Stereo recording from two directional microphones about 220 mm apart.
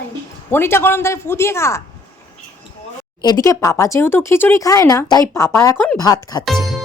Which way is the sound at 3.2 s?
15° left (ahead or behind).